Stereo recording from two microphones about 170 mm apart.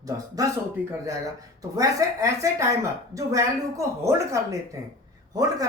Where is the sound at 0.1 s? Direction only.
20° right (ahead or behind).